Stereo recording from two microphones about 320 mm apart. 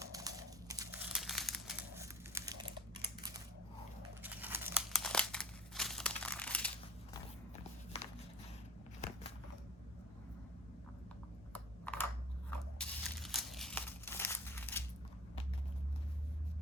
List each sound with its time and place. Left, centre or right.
0.0 s crumpling: centre
4.2 s crumpling: centre
7.1 s walk: centre
11.5 s computer keyboard: centre
12.5 s crumpling: centre